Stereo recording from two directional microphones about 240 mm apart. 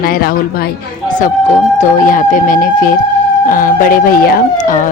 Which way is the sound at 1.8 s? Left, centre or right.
Left.